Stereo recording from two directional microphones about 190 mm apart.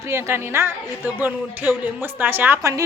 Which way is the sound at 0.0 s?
15° right (ahead or behind).